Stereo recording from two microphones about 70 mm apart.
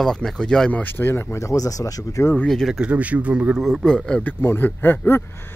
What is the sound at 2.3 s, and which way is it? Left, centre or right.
Speech, centre.